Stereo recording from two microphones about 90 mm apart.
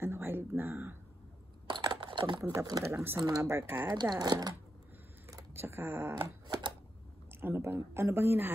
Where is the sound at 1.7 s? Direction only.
55° right (ahead or behind).